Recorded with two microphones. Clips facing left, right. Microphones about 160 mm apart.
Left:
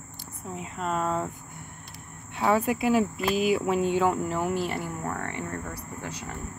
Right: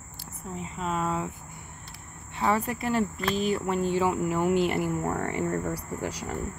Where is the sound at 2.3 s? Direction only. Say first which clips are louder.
Left 3 dB; 5° left (ahead or behind).